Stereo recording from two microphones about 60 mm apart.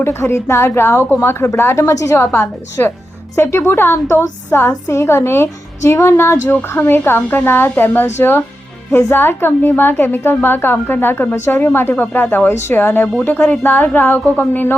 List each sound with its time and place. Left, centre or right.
0.0 s a woman's voice: left
2.1 s a woman's voice: left
3.9 s a woman's voice: left
8.9 s a woman's voice: left
9.1 s a woman's voice: left